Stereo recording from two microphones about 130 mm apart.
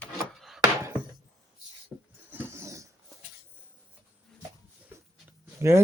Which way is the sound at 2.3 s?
15° right (ahead or behind).